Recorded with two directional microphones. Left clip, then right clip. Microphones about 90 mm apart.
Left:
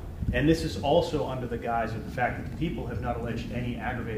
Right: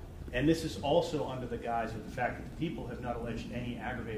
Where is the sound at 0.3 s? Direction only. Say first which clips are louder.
Left 5 dB; 20° right (ahead or behind).